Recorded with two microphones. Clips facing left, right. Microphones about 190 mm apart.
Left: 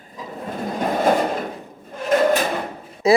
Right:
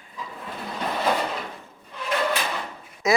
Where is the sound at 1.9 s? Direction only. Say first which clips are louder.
Left 8 dB; 45° left (ahead or behind).